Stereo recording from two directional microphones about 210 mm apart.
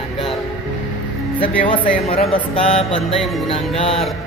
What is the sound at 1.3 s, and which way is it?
Speech, 25° left (ahead or behind).